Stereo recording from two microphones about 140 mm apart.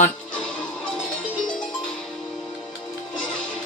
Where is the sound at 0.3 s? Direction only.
5° left (ahead or behind).